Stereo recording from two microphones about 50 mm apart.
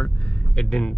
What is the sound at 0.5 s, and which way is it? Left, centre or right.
Speech, centre.